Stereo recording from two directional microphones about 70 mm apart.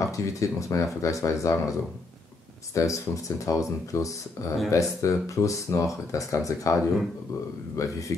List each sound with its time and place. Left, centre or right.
0.0 s speech: left